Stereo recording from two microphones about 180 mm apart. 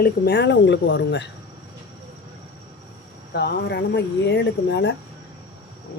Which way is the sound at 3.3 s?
65° left (ahead or behind).